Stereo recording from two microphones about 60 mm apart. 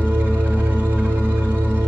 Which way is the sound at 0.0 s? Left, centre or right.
Right.